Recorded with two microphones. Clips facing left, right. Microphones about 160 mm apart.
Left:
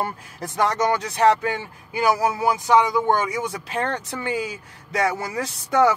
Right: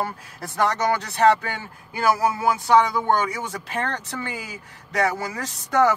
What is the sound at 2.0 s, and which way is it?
A man's voice, 15° left (ahead or behind).